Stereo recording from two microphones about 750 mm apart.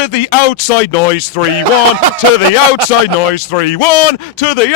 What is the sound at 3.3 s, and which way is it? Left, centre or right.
A man's voice, left.